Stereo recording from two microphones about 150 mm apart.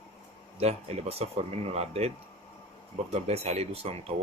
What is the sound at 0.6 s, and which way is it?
Speech, 45° right (ahead or behind).